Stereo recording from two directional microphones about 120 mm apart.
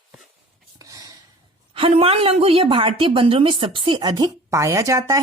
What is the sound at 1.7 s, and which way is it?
A woman's voice, 55° right (ahead or behind).